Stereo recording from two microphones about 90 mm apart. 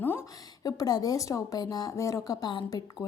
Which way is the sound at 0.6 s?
45° left (ahead or behind).